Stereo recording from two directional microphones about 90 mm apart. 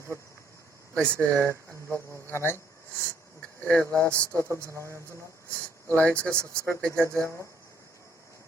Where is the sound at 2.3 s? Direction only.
25° left (ahead or behind).